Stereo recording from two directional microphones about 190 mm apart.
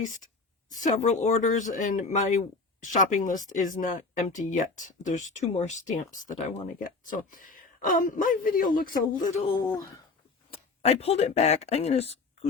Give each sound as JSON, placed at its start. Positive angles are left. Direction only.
{"t": 0.7, "sound": "speech", "side_deg": 40}
{"t": 9.4, "sound": "speech", "side_deg": 30}